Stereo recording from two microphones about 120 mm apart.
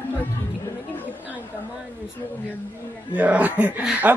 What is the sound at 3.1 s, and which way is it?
A man's voice, 10° right (ahead or behind).